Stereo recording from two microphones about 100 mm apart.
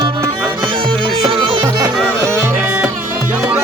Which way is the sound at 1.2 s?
55° right (ahead or behind).